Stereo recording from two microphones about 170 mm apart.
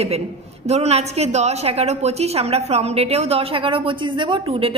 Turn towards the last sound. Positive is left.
turn(degrees=-35)  # may be behind; listen again after turning